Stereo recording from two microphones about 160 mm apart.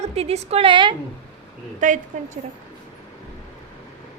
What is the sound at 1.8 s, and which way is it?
Speech, 50° right (ahead or behind).